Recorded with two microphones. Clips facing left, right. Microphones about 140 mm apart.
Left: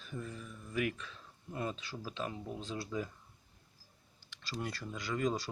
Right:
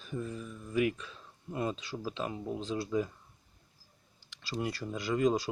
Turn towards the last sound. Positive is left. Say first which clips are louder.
# right 6 dB
turn(degrees=-10)  # may be behind; listen again after turning